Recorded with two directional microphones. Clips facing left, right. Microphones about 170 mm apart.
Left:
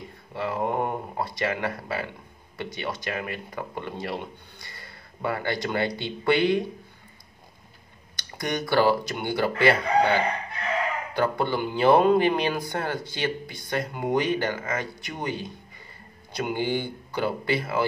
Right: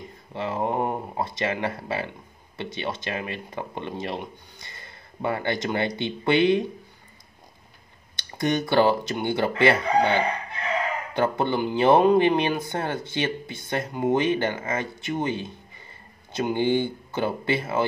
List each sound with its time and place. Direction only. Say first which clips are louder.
0.3 s speech: right 1 dB; 25° right (ahead or behind)
8.2 s speech: right 5 dB; 25° right (ahead or behind)
11.1 s speech: right 2 dB; 25° right (ahead or behind)